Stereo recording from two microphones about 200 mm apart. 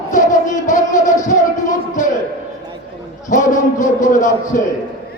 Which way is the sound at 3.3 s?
40° left (ahead or behind).